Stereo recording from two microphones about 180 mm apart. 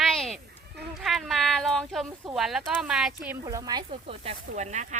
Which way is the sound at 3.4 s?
20° right (ahead or behind).